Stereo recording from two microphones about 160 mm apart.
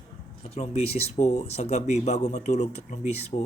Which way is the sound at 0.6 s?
40° left (ahead or behind).